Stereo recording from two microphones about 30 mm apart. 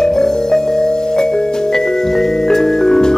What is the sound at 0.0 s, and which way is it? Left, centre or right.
Music, centre.